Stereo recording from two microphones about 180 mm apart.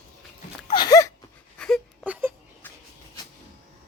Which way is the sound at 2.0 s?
10° right (ahead or behind).